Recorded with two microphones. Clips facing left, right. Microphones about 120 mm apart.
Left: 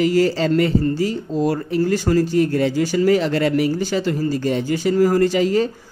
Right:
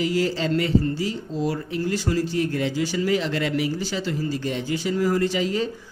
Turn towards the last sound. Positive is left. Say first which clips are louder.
# left 6 dB
turn(degrees=45)  # may be behind; listen again after turning